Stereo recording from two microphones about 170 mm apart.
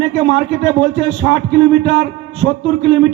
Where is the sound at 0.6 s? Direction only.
40° left (ahead or behind).